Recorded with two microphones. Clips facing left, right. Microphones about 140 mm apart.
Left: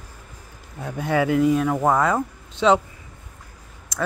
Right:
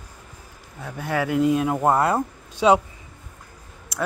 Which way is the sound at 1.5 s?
15° right (ahead or behind).